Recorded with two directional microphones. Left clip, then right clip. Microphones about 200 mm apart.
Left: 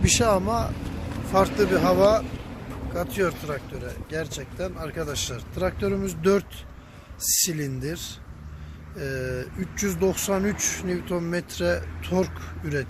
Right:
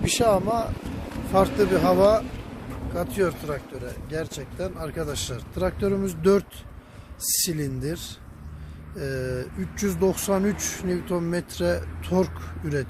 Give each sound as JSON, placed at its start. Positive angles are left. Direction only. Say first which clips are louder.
{"t": 0.0, "sound": "speech", "louder": "even", "side_deg": 0}